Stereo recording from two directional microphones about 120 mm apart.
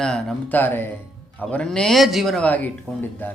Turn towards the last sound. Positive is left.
turn(degrees=15)  # may be behind; listen again after turning